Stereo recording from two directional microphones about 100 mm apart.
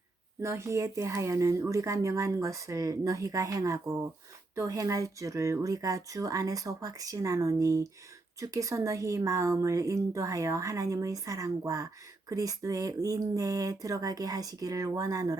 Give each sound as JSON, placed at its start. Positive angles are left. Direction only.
{"t": 0.4, "sound": "speech", "side_deg": -30}